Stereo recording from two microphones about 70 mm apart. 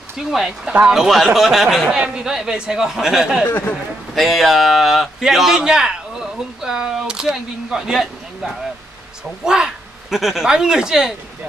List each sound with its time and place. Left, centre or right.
0.2 s a man's voice: centre
1.9 s speech: centre
3.4 s speech: left
4.1 s a man's voice: centre
9.4 s speech: centre